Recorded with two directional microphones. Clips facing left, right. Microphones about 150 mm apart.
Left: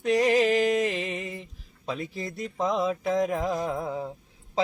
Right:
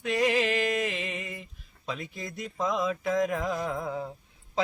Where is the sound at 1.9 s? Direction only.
30° left (ahead or behind).